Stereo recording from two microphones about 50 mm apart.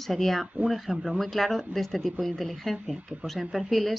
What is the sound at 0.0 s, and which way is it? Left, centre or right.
Speech, centre.